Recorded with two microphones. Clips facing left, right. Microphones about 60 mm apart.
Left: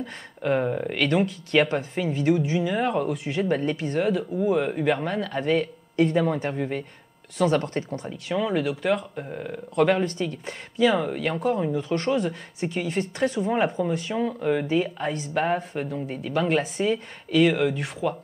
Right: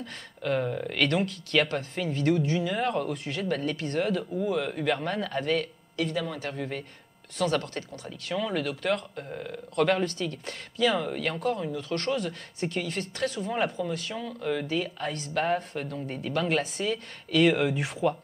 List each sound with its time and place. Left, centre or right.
0.0 s speech: centre
0.9 s speech: centre
6.0 s a man's voice: left
6.3 s speech: centre
11.5 s speech: left; by 18.1 s centre